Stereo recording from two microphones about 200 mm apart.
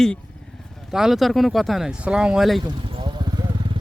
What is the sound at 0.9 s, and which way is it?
Speech, centre (ahead or behind).